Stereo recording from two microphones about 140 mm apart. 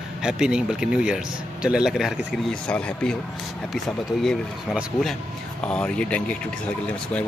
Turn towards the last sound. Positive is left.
turn(degrees=10)  # may be behind; listen again after turning